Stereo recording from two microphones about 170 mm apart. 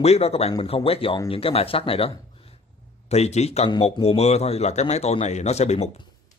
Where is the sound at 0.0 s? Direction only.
40° left (ahead or behind).